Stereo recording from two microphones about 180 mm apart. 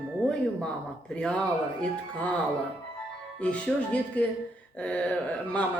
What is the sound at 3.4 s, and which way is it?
Speech, 5° left (ahead or behind).